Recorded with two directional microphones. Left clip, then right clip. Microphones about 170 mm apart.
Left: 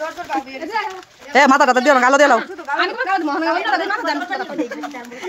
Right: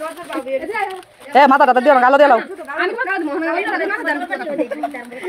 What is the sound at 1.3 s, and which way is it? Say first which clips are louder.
Speech: right 2 dB; 20° left (ahead or behind).